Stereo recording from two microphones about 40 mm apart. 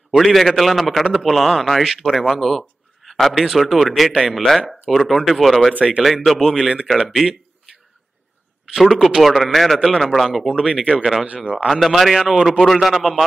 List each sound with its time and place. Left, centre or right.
0.2 s a man's voice: centre
5.8 s speech: right
6.2 s a man's voice: centre
8.7 s a man's voice: centre
10.5 s speech: right
11.6 s a man's voice: centre
12.2 s speech: centre
12.4 s a man's voice: centre